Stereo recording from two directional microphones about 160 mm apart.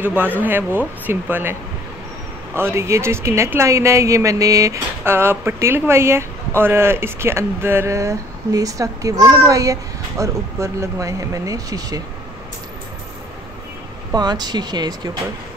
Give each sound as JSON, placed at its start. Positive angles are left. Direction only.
{"t": 0.0, "sound": "speech", "side_deg": -10}
{"t": 14.1, "sound": "speech", "side_deg": -25}